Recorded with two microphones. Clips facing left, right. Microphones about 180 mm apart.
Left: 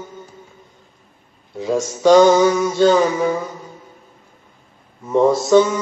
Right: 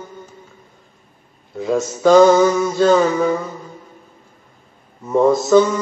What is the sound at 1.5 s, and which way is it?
Mantra, centre (ahead or behind).